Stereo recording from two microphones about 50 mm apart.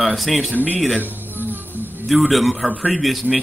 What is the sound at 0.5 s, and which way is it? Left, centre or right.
Speech, right.